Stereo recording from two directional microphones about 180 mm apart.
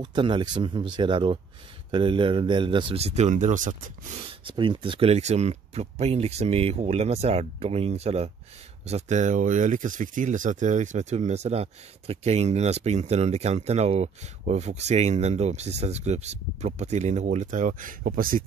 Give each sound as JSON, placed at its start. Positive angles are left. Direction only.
{"t": 0.0, "sound": "speech", "side_deg": -25}
{"t": 4.2, "sound": "speech", "side_deg": -30}